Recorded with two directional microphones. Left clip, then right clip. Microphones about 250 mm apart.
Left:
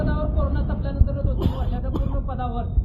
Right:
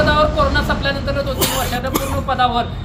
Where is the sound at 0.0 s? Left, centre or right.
Right.